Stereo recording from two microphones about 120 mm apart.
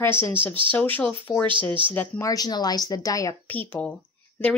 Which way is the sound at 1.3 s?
35° left (ahead or behind).